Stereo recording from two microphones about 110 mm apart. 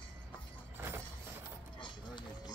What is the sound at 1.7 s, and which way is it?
Mechanisms, 45° left (ahead or behind).